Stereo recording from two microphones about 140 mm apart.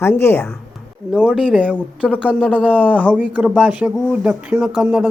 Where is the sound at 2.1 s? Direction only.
10° right (ahead or behind).